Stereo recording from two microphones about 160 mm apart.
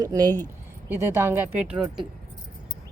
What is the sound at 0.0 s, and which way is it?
Speech, 25° right (ahead or behind).